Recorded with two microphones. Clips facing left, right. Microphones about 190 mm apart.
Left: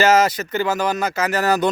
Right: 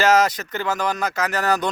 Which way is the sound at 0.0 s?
5° left (ahead or behind).